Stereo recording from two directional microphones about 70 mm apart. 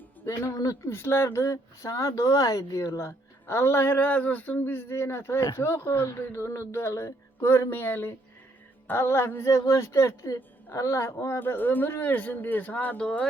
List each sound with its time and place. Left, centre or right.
0.5 s speech: left
0.9 s speech: left
3.1 s speech: left
11.3 s speech: left